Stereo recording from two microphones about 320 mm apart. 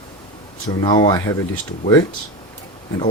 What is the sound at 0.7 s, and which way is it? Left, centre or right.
Speech, centre.